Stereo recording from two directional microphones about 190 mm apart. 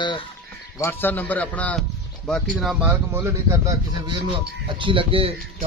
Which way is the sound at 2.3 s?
5° right (ahead or behind).